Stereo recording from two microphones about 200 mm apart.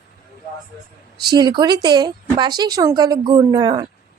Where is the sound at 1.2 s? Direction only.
20° right (ahead or behind).